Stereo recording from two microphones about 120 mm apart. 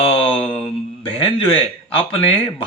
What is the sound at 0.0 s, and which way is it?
Mantra, 50° left (ahead or behind).